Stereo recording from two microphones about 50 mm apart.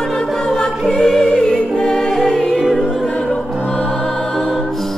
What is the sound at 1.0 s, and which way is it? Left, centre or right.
Music, centre.